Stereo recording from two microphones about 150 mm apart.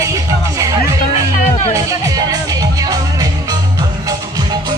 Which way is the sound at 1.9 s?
25° right (ahead or behind).